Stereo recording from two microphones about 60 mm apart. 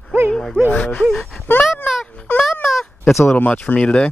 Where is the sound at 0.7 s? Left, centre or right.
Left.